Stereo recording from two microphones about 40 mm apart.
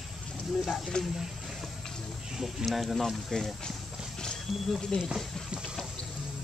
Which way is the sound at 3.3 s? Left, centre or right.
Centre.